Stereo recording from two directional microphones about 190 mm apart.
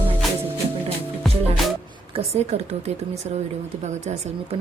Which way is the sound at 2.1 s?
35° right (ahead or behind).